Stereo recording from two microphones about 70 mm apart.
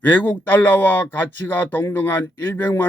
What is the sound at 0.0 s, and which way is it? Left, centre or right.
A man's voice, left.